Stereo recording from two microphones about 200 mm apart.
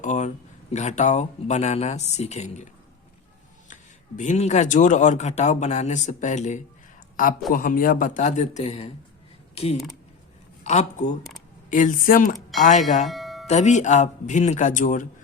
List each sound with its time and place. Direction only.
0.0 s speech: 35° left (ahead or behind)
4.2 s speech: 35° left (ahead or behind)
10.6 s speech: 35° left (ahead or behind)
13.1 s music: centre (ahead or behind)
13.5 s speech: 35° left (ahead or behind)